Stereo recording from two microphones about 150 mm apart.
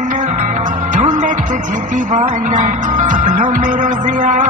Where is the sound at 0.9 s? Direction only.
60° right (ahead or behind).